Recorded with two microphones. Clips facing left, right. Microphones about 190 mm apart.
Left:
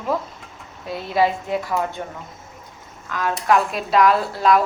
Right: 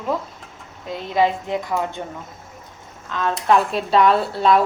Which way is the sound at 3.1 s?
25° right (ahead or behind).